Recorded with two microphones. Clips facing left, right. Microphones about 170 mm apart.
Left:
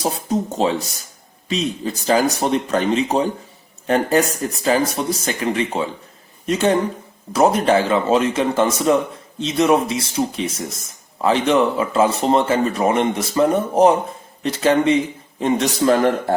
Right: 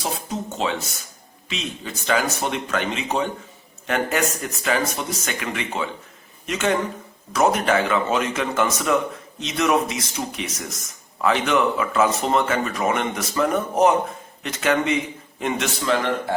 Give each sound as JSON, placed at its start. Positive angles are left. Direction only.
{"t": 0.0, "sound": "speech", "side_deg": 35}